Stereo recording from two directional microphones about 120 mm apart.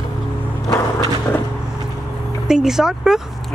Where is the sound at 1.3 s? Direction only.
20° left (ahead or behind).